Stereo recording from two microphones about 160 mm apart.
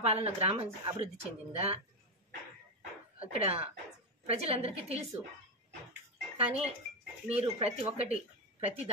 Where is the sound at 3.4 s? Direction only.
40° right (ahead or behind).